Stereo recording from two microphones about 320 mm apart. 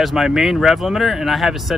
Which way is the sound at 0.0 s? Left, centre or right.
Centre.